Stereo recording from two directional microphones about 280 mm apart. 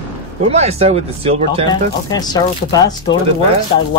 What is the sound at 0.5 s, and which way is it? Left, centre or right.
Speech, right.